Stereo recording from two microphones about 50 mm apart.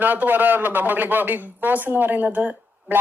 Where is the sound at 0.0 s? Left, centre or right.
Right.